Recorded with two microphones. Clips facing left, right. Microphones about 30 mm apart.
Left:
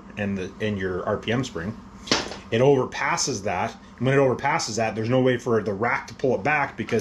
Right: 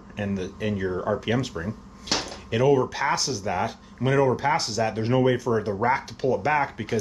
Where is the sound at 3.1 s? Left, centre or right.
Centre.